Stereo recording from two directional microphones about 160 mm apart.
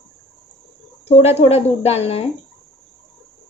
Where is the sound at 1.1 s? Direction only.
40° left (ahead or behind).